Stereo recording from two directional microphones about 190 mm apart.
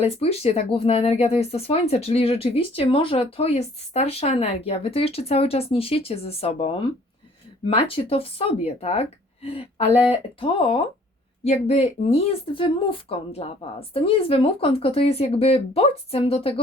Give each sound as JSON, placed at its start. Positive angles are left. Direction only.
{"t": 0.0, "sound": "speech", "side_deg": 30}